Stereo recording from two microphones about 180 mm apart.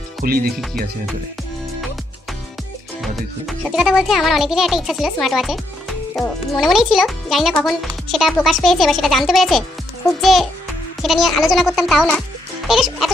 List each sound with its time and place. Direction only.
0.2 s speech: 55° right (ahead or behind)
3.0 s a child's voice: centre (ahead or behind)